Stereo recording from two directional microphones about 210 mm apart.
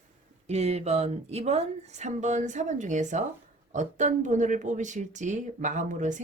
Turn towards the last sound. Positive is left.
turn(degrees=-35)  # may be behind; listen again after turning